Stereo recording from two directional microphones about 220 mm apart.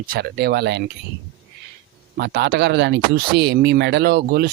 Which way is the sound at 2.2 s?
50° right (ahead or behind).